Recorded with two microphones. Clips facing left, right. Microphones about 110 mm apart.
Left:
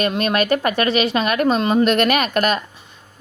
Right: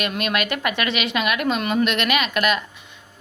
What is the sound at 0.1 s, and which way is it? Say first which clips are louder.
A woman's voice: left 6 dB; 35° left (ahead or behind).